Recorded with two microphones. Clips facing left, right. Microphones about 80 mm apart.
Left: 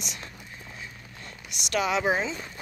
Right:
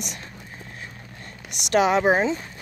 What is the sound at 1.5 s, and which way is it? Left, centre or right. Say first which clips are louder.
Speech: right 7 dB; right.